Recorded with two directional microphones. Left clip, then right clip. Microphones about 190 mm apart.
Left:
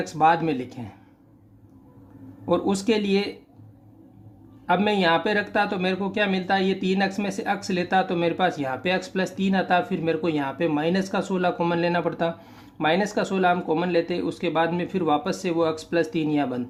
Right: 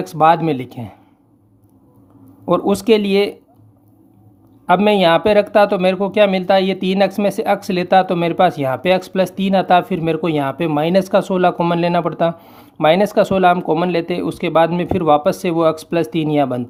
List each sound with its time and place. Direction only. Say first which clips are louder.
0.0 s speech: right 7 dB; 40° right (ahead or behind)
2.5 s speech: right 9 dB; 40° right (ahead or behind)
4.6 s speech: right 9 dB; 40° right (ahead or behind)